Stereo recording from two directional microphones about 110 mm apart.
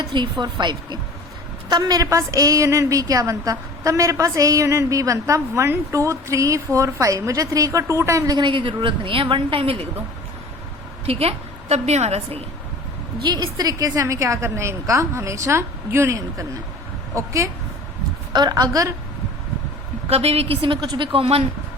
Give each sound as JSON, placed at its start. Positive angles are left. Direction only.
{"t": 0.0, "sound": "a woman's voice", "side_deg": -40}
{"t": 8.4, "sound": "a woman's voice", "side_deg": -50}
{"t": 11.0, "sound": "a woman's voice", "side_deg": -65}
{"t": 13.2, "sound": "a woman's voice", "side_deg": -40}
{"t": 18.3, "sound": "a woman's voice", "side_deg": -35}
{"t": 20.1, "sound": "a woman's voice", "side_deg": -65}